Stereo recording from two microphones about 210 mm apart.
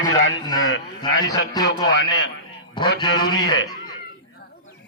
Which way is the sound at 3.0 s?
20° left (ahead or behind).